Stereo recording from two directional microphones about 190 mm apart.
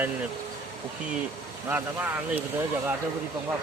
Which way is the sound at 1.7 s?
10° right (ahead or behind).